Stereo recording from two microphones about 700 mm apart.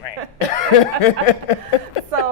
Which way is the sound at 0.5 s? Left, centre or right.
Left.